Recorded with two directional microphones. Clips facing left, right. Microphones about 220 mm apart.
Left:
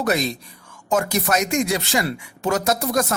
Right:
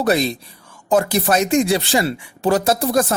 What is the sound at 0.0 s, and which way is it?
A man's voice, 30° right (ahead or behind).